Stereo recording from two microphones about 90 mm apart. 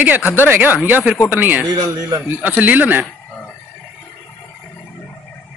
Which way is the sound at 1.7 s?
45° right (ahead or behind).